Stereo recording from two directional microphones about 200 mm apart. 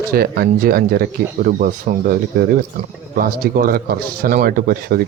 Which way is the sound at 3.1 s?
45° right (ahead or behind).